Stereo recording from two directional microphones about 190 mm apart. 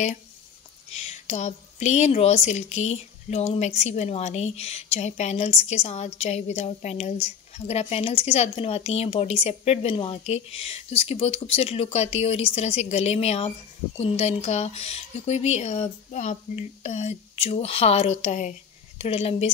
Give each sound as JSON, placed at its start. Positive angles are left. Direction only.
{"t": 0.8, "sound": "a woman's voice", "side_deg": 35}